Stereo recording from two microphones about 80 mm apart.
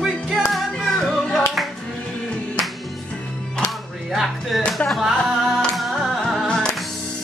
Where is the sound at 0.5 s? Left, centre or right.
Centre.